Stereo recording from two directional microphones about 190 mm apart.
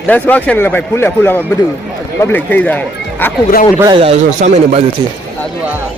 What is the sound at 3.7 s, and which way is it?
Speech, 20° right (ahead or behind).